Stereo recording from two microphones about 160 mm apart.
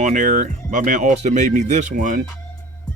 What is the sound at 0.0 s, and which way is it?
Speech, 50° right (ahead or behind).